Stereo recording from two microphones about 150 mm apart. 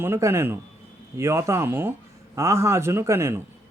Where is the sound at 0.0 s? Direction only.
15° right (ahead or behind).